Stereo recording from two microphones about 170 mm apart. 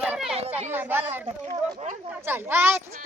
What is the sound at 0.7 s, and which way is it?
Speech, 10° right (ahead or behind).